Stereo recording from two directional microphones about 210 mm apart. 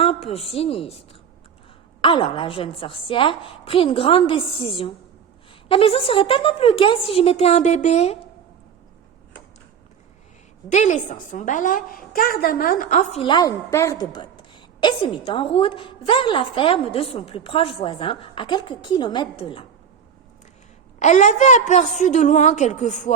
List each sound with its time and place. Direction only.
0.0 s a woman's voice: 30° left (ahead or behind)
10.7 s a woman's voice: 35° left (ahead or behind)
21.0 s a woman's voice: 35° left (ahead or behind)